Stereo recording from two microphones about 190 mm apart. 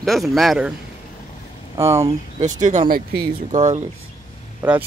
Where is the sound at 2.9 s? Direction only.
55° right (ahead or behind).